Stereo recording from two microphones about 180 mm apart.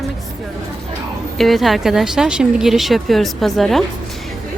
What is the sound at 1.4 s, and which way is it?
Speech, centre (ahead or behind).